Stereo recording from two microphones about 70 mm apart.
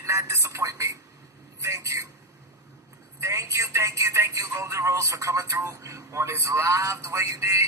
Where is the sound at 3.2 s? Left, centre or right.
Right.